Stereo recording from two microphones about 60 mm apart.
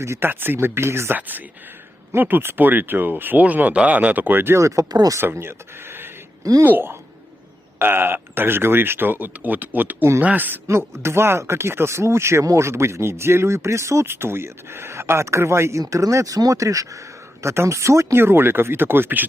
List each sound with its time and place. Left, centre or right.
0.0 s speech: right
0.3 s speech: right
1.1 s speech: right
4.5 s speech: right
5.2 s speech: right
10.7 s speech: right
15.8 s speech: right
18.2 s speech: right